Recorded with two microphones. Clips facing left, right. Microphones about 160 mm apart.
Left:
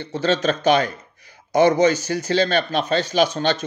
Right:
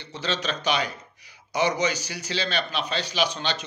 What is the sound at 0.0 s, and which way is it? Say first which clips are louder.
Speech: left 10 dB; 50° left (ahead or behind).